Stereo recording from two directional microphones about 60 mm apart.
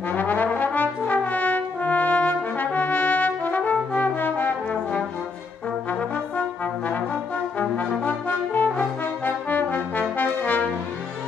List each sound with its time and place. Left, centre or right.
0.1 s brass instrument: left
5.9 s brass instrument: left
8.0 s brass instrument: left